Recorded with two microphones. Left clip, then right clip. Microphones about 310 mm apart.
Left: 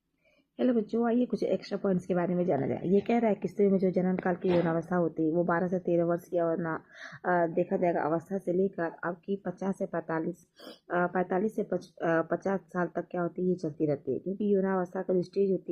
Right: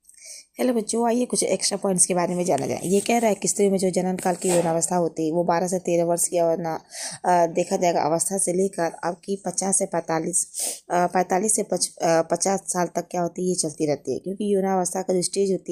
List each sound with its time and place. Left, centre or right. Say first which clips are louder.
0.6 s a woman's voice: right 6 dB; centre